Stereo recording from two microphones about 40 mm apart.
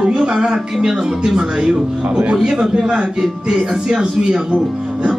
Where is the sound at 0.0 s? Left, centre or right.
Right.